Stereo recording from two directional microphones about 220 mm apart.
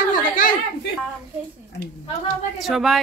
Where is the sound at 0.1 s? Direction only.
40° left (ahead or behind).